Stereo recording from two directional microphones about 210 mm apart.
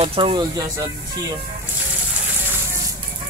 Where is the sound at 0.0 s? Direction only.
20° right (ahead or behind).